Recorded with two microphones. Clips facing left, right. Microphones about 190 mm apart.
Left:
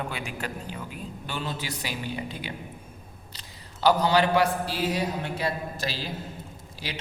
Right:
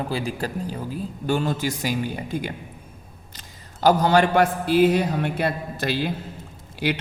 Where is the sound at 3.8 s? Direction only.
45° right (ahead or behind).